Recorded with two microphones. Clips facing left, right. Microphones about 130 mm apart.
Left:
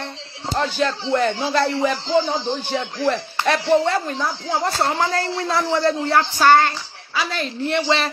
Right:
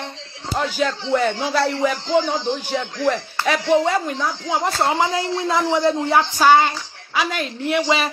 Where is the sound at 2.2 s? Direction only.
10° left (ahead or behind).